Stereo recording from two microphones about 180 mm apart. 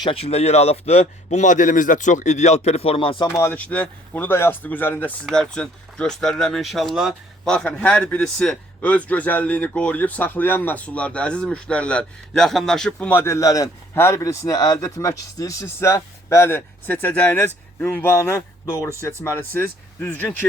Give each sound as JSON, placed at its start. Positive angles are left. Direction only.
{"t": 0.0, "sound": "speech", "side_deg": 30}
{"t": 3.2, "sound": "speech", "side_deg": 15}